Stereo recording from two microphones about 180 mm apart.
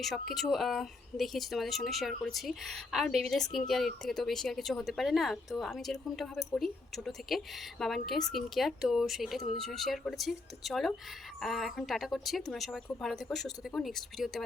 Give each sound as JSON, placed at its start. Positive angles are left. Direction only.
{"t": 0.0, "sound": "speech", "side_deg": 0}